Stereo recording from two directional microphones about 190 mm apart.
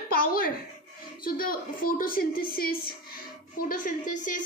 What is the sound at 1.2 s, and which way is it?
A child's voice, 50° left (ahead or behind).